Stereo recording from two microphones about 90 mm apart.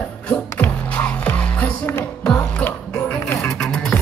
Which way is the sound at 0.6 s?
15° left (ahead or behind).